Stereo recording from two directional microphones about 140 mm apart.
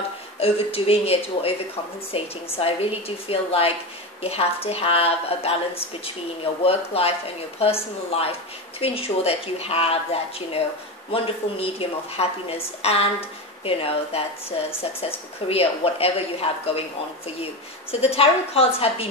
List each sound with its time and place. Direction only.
0.4 s speech: 45° left (ahead or behind)
18.0 s speech: 45° left (ahead or behind)